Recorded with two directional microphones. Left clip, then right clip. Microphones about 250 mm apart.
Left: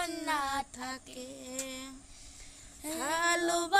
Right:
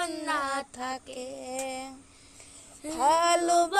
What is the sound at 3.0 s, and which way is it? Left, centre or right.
Music, centre.